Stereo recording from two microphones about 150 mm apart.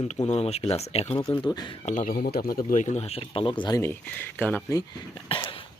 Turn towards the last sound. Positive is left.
turn(degrees=35)  # may be behind; listen again after turning